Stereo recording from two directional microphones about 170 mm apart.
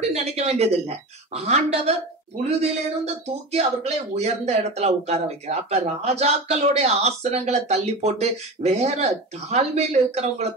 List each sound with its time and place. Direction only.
0.1 s speech: 40° right (ahead or behind)
3.3 s speech: 40° right (ahead or behind)